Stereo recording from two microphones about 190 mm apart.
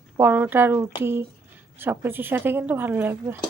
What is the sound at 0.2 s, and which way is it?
Speech, 10° right (ahead or behind).